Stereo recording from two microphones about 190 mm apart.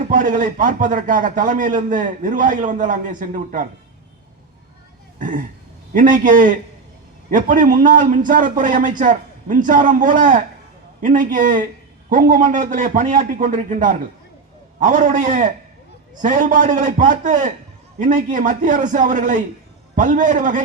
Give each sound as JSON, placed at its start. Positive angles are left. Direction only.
{"t": 0.1, "sound": "a man's voice", "side_deg": -45}
{"t": 5.2, "sound": "a man's voice", "side_deg": -45}